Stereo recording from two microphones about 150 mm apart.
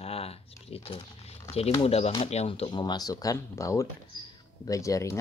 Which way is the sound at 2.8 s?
25° left (ahead or behind).